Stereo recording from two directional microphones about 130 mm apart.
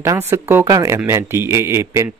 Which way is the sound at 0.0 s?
20° right (ahead or behind).